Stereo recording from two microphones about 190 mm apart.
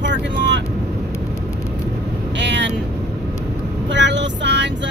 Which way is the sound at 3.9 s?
70° right (ahead or behind).